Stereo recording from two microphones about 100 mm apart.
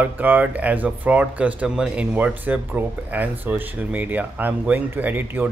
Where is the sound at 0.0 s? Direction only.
15° right (ahead or behind).